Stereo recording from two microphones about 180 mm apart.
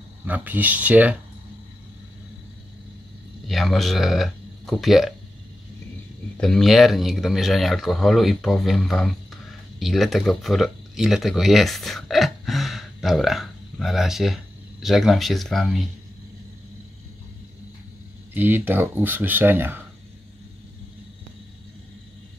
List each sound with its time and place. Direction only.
0.2 s speech: 10° right (ahead or behind)
3.4 s speech: centre (ahead or behind)
6.3 s speech: centre (ahead or behind)
18.3 s speech: 10° right (ahead or behind)